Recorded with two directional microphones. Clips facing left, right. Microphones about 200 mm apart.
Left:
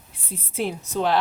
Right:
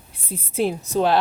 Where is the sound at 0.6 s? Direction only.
35° right (ahead or behind).